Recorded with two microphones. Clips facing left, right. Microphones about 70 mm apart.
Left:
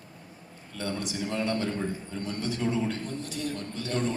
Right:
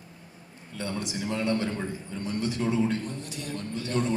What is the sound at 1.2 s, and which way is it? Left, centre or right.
Speech, right.